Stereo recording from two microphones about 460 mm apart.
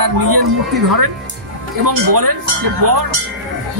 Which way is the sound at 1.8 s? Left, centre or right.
Right.